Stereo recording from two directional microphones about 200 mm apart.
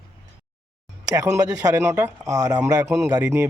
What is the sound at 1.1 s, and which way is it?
Speech, 15° right (ahead or behind).